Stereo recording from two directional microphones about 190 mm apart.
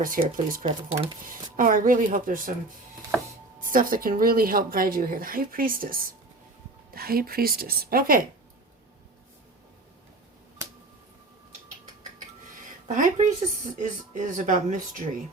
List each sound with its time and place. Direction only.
0.0 s speech: 45° right (ahead or behind)
0.6 s speech: 25° right (ahead or behind)
1.2 s speech: 45° right (ahead or behind)
3.6 s speech: 45° right (ahead or behind)
13.0 s speech: 40° right (ahead or behind)